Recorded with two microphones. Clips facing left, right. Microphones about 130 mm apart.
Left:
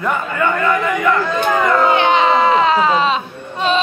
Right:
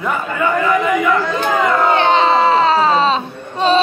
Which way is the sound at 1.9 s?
30° right (ahead or behind).